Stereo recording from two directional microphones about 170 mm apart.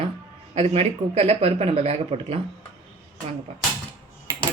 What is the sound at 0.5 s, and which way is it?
Speech, 35° right (ahead or behind).